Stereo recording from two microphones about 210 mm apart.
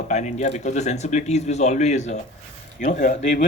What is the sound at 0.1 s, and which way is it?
Speech, 35° left (ahead or behind).